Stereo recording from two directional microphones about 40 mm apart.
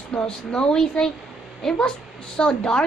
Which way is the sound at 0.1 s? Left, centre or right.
Left.